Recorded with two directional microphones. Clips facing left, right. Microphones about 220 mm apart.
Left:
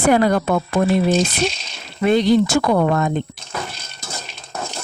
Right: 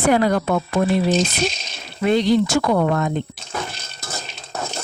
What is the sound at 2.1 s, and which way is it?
Speech, 50° left (ahead or behind).